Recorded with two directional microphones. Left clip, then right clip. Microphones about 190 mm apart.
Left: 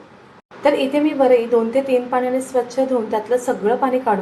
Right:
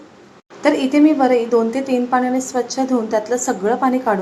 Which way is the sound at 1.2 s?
20° right (ahead or behind).